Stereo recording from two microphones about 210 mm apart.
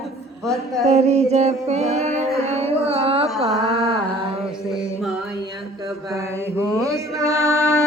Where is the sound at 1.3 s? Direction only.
30° right (ahead or behind).